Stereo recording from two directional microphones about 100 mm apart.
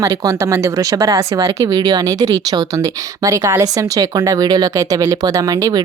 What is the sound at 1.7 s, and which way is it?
Speech, 40° right (ahead or behind).